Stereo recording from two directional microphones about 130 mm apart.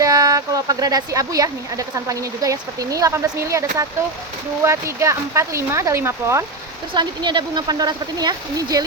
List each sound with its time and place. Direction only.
0.0 s speech: 25° right (ahead or behind)
6.9 s speech: 35° right (ahead or behind)